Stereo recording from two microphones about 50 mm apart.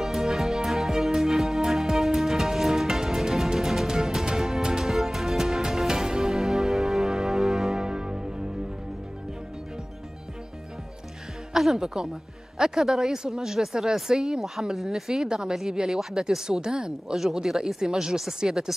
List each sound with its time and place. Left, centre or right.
0.0 s music: centre
11.5 s speech: centre